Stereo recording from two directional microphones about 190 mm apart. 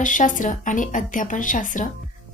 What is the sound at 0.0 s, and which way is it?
A woman's voice, 45° left (ahead or behind).